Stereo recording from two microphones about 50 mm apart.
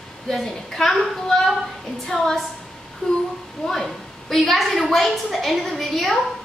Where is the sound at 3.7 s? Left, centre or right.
Centre.